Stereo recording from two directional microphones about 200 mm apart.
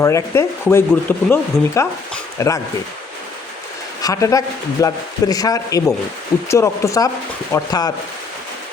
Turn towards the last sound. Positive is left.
turn(degrees=15)  # may be behind; listen again after turning